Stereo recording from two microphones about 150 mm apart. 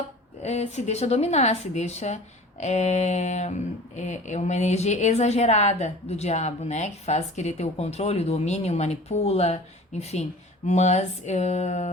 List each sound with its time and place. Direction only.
0.4 s a woman's voice: 45° left (ahead or behind)